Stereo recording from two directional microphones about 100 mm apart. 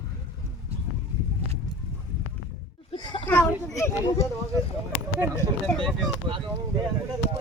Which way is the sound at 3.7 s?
30° left (ahead or behind).